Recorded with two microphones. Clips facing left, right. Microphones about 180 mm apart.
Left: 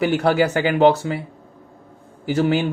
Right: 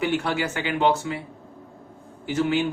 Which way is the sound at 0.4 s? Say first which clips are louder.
Left 8 dB; 65° left (ahead or behind).